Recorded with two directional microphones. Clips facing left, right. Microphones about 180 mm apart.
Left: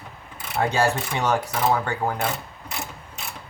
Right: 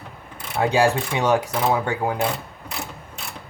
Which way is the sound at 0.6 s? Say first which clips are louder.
Right 3 dB; 15° right (ahead or behind).